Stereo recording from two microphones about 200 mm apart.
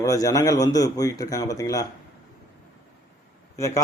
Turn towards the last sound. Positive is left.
turn(degrees=15)  # may be behind; listen again after turning